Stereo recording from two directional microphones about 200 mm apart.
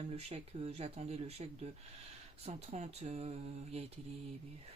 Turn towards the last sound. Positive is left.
turn(degrees=-30)  # may be behind; listen again after turning